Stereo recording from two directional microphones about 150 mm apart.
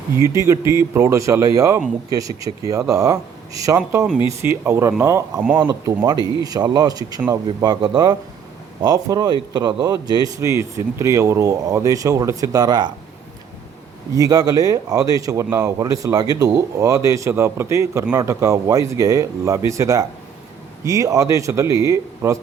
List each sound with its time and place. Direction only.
0.2 s speech: 20° right (ahead or behind)
3.8 s speech: 5° right (ahead or behind); by 12.9 s 25° right (ahead or behind)
14.2 s speech: 25° right (ahead or behind)